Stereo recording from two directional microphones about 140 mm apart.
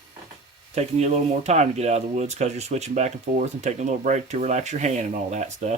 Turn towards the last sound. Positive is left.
turn(degrees=-55)  # may be behind; listen again after turning